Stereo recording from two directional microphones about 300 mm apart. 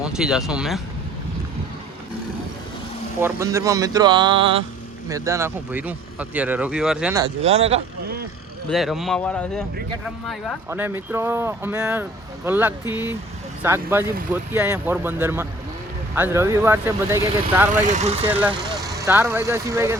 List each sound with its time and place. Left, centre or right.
0.0 s speech: centre
3.2 s speech: centre
7.4 s speech: right
8.7 s speech: centre
17.7 s speech: right
18.3 s speech: centre